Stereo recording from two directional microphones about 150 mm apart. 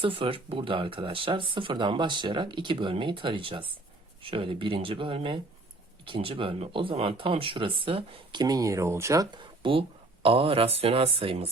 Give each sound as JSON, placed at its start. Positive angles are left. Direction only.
{"t": 0.0, "sound": "speech", "side_deg": -35}